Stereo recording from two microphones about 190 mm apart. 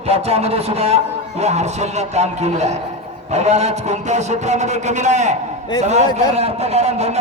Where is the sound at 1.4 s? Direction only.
35° right (ahead or behind).